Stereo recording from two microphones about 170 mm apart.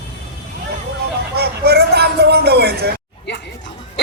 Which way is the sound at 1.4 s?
70° right (ahead or behind).